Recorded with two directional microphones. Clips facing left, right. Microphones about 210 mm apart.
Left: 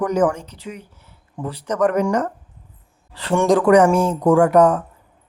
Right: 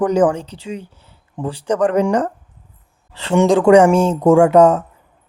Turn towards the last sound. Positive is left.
turn(degrees=-25)  # may be behind; listen again after turning